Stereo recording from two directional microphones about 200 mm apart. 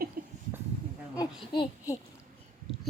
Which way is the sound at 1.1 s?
20° left (ahead or behind).